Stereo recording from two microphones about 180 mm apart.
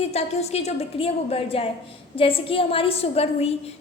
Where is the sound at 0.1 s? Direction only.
35° left (ahead or behind).